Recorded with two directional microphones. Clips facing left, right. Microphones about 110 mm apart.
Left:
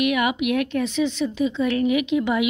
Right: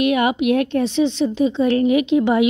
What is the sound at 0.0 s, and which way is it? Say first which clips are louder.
A woman's voice: right 4 dB; 30° right (ahead or behind).